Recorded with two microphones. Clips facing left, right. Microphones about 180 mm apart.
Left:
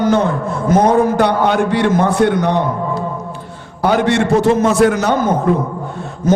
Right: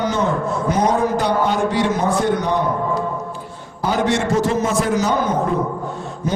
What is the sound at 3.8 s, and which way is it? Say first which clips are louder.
Speech: left 5 dB; 65° left (ahead or behind).